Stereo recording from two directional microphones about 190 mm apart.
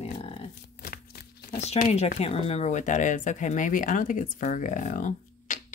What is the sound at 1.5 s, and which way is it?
Speech, 35° left (ahead or behind).